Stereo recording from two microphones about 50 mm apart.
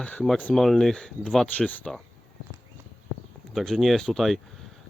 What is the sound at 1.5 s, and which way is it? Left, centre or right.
Speech, left.